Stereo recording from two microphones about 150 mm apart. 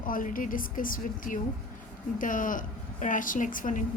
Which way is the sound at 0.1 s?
65° left (ahead or behind).